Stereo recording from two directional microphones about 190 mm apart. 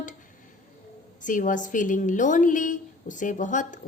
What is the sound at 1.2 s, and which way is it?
A woman's voice, 45° left (ahead or behind).